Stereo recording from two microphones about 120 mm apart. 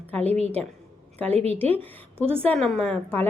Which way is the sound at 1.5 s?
15° left (ahead or behind).